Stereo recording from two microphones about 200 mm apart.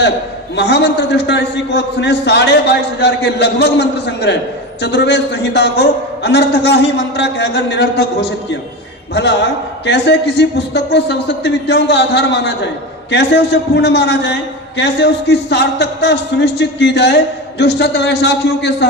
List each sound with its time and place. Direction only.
0.5 s a man's voice: 60° left (ahead or behind)